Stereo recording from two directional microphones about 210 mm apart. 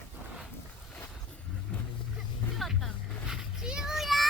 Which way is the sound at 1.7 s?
5° left (ahead or behind).